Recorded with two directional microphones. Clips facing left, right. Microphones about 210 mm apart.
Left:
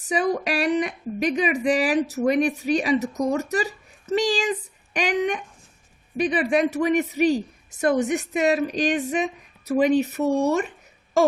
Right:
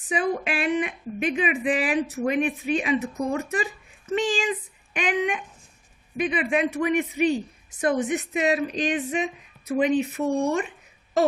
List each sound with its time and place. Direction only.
0.1 s a woman's voice: 40° left (ahead or behind)